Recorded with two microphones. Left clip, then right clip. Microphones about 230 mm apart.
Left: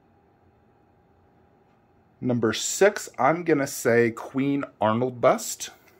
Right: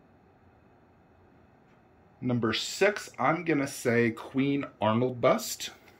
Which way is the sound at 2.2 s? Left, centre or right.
Left.